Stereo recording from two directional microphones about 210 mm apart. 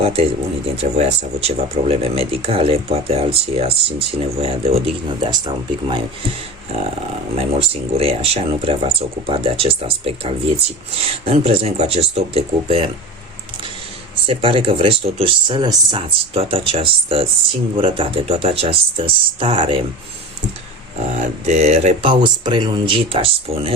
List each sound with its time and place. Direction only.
0.0 s speech: 30° right (ahead or behind)
7.3 s speech: 30° right (ahead or behind)
14.3 s speech: 25° right (ahead or behind)
21.2 s speech: 30° right (ahead or behind)